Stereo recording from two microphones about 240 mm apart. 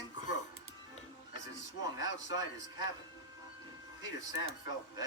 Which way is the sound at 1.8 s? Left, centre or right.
Left.